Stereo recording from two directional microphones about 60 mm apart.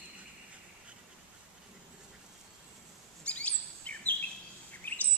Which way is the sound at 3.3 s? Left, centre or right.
Left.